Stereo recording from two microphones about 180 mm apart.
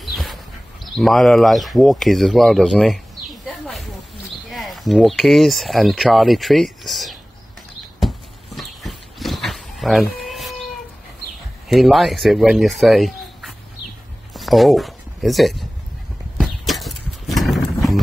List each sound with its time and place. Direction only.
0.0 s a sound: centre (ahead or behind)
0.8 s speech: centre (ahead or behind)
8.5 s wild animals: centre (ahead or behind)
11.7 s speech: centre (ahead or behind)
14.3 s a sound: centre (ahead or behind)
16.3 s horse: centre (ahead or behind)